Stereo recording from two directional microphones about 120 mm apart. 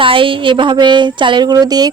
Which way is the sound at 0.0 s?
45° right (ahead or behind).